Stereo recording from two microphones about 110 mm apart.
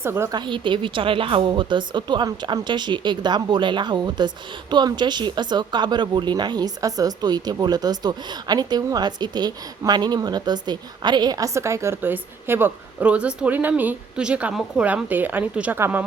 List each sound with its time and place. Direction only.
0.0 s a woman's voice: 20° right (ahead or behind)
0.3 s a woman's voice: 45° right (ahead or behind); by 16.0 s 15° right (ahead or behind)